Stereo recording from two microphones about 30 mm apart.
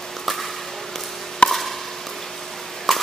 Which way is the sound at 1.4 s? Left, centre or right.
Left.